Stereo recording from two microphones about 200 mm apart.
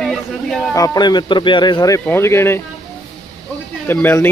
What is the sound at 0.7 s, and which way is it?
Speech, 20° left (ahead or behind).